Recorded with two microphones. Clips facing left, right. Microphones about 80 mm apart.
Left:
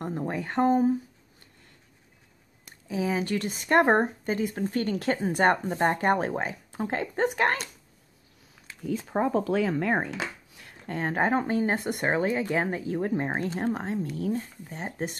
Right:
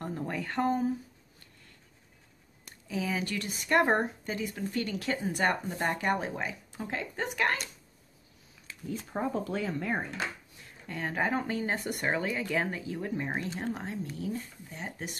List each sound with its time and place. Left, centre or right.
0.0 s speech: left
2.9 s speech: left
8.8 s speech: left
10.9 s speech: left